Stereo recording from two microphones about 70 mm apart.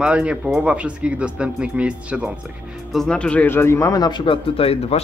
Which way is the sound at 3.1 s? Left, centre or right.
Centre.